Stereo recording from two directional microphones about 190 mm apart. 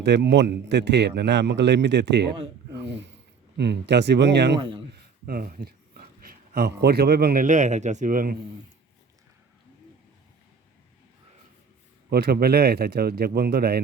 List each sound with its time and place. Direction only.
0.0 s a man's voice: 65° right (ahead or behind)
5.2 s speech: 50° right (ahead or behind)
12.1 s speech: 55° right (ahead or behind)